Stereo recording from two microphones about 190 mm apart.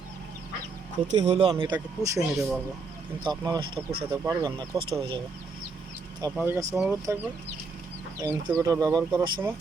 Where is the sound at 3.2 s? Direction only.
20° right (ahead or behind).